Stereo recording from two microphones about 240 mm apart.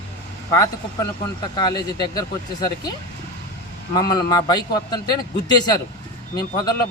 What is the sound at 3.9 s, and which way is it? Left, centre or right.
Speech, centre.